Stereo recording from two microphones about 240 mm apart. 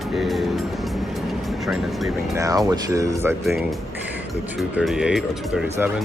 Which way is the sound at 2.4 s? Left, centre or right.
Centre.